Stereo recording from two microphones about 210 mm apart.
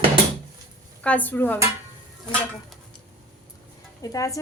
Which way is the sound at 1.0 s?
5° left (ahead or behind).